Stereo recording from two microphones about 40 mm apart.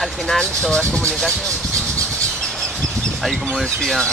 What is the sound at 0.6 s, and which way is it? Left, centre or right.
Speech, left.